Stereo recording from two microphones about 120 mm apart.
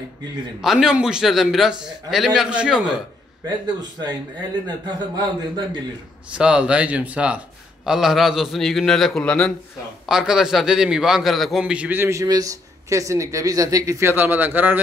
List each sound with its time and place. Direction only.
0.6 s a man's voice: 5° right (ahead or behind)
4.0 s speech: 40° right (ahead or behind)
6.3 s a man's voice: 10° right (ahead or behind); by 9.5 s 10° left (ahead or behind)
10.0 s a man's voice: 5° right (ahead or behind)